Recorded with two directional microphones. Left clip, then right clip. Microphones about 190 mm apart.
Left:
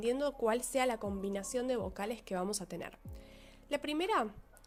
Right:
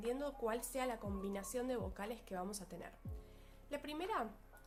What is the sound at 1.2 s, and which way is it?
A woman's voice, 30° left (ahead or behind).